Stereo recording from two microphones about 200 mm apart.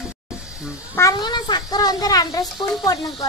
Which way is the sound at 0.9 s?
20° left (ahead or behind).